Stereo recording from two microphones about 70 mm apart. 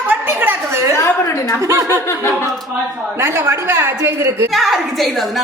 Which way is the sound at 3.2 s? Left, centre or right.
Right.